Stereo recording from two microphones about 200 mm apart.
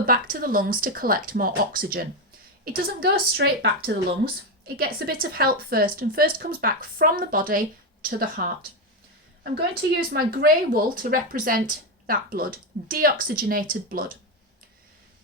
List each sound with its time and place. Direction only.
0.0 s speech: 45° right (ahead or behind)
9.9 s speech: 50° right (ahead or behind)